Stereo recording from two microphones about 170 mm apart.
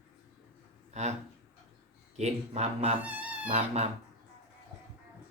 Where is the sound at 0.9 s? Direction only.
40° right (ahead or behind).